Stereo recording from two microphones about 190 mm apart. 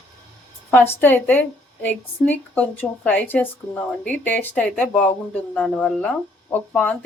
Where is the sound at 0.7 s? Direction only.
10° left (ahead or behind).